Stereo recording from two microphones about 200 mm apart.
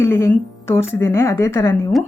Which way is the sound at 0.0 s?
10° left (ahead or behind).